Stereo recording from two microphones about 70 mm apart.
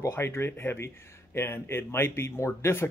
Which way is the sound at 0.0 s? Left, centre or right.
Left.